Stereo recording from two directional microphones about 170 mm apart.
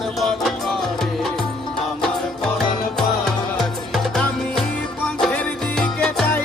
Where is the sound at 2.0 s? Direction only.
Centre (ahead or behind).